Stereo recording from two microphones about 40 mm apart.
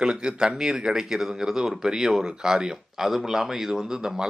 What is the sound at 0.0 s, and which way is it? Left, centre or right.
A man's voice, right.